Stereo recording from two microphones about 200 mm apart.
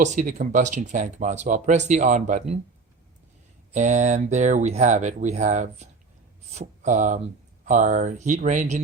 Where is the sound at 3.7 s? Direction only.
35° right (ahead or behind).